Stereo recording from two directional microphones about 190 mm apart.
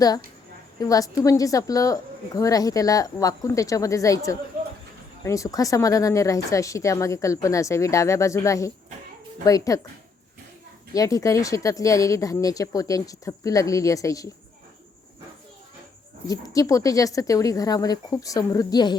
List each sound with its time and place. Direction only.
0.8 s a woman's voice: 20° left (ahead or behind)
10.9 s a woman's voice: 20° left (ahead or behind)
16.2 s a woman's voice: 20° left (ahead or behind)